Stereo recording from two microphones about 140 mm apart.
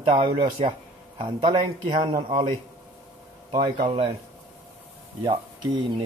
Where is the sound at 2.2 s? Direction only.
45° right (ahead or behind).